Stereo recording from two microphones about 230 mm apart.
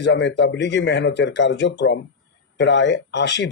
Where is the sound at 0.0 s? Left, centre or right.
Left.